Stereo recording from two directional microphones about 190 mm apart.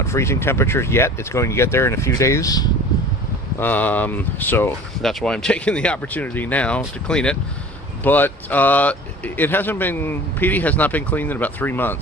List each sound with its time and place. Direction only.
0.0 s speech: 15° left (ahead or behind)